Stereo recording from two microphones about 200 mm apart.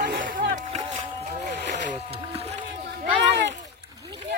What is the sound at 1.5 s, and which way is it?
Boat, 35° right (ahead or behind).